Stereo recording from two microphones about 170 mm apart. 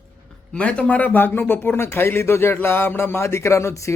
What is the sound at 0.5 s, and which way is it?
Speech, 5° left (ahead or behind).